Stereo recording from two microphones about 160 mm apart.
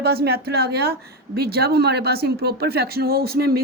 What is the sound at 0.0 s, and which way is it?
A woman's voice, 75° right (ahead or behind).